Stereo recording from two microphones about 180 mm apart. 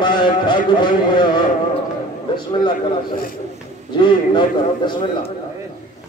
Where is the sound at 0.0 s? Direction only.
25° left (ahead or behind).